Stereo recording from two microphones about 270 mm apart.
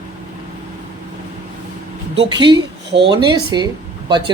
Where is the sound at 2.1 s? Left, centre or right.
Centre.